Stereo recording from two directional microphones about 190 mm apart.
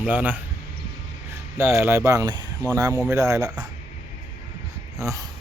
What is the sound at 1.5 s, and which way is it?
Speech, 15° right (ahead or behind).